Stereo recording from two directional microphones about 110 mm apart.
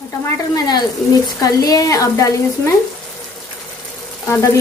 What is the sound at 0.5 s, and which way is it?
Speech, 40° left (ahead or behind).